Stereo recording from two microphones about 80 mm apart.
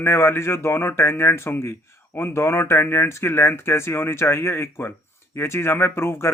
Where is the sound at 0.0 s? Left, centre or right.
Left.